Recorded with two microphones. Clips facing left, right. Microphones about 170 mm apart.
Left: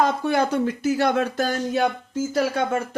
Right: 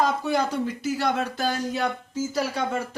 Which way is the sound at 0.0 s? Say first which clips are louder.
Left 3 dB; 55° left (ahead or behind).